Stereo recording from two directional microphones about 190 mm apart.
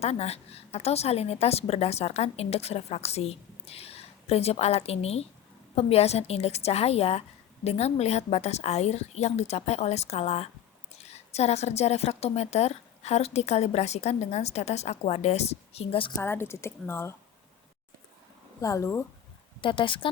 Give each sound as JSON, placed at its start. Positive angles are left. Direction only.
{"t": 0.0, "sound": "a woman's voice", "side_deg": 35}
{"t": 16.1, "sound": "speech", "side_deg": 10}
{"t": 18.6, "sound": "speech", "side_deg": 15}
{"t": 19.6, "sound": "speech", "side_deg": 25}